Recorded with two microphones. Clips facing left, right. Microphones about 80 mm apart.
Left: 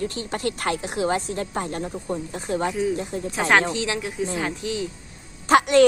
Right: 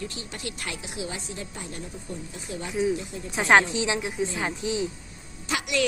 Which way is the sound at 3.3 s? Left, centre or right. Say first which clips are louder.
Even; centre.